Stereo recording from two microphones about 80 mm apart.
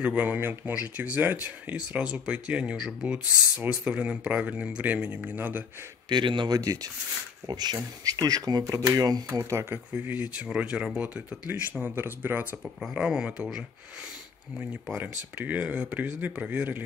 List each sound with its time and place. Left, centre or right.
0.0 s speech: centre
6.0 s a man's voice: right
6.5 s speech: right
9.3 s speech: right
9.9 s speech: right
11.9 s speech: right
12.9 s speech: centre
15.0 s speech: right